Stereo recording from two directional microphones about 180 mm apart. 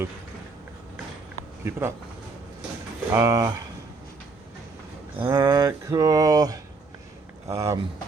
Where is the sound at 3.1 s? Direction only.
15° right (ahead or behind).